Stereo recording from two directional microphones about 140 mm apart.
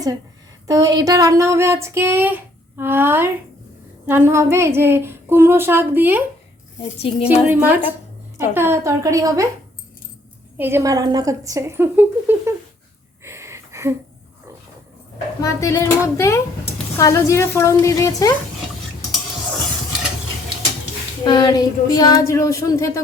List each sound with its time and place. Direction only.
0.7 s speech: 25° right (ahead or behind)
4.0 s female singing: 15° right (ahead or behind)
7.0 s a woman's voice: 45° left (ahead or behind)
7.4 s female singing: 15° right (ahead or behind)
8.4 s speech: 15° right (ahead or behind)
10.6 s speech: 15° right (ahead or behind)
13.2 s a sound: 20° right (ahead or behind)
15.4 s speech: 25° left (ahead or behind)
21.2 s speech: 30° left (ahead or behind)